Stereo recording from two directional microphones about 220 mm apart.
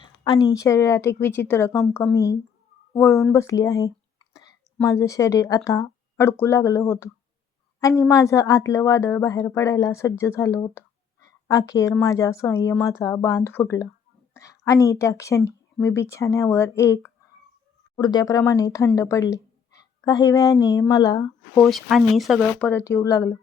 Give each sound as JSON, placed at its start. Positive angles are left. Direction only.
{"t": 0.0, "sound": "a woman's voice", "side_deg": 20}
{"t": 3.3, "sound": "a sound", "side_deg": 15}
{"t": 4.8, "sound": "a woman's voice", "side_deg": 15}
{"t": 21.6, "sound": "speech", "side_deg": 0}